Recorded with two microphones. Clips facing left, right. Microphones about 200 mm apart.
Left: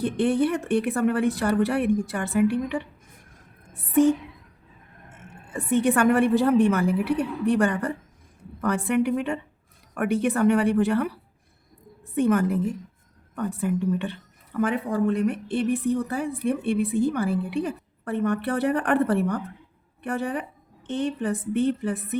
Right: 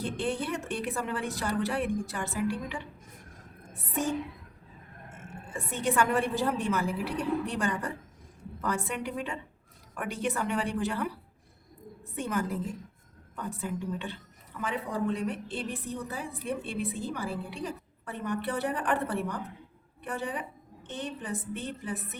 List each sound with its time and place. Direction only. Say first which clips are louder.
0.0 s a woman's voice: left 10 dB; 60° left (ahead or behind)
5.7 s a woman's voice: left 8 dB; 60° left (ahead or behind)
12.1 s a woman's voice: left 10 dB; 60° left (ahead or behind)